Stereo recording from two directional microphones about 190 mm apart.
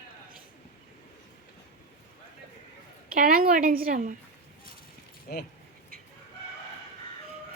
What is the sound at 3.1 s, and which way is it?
A woman's voice, 50° right (ahead or behind).